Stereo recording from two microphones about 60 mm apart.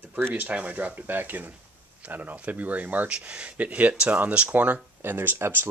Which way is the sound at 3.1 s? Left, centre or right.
Centre.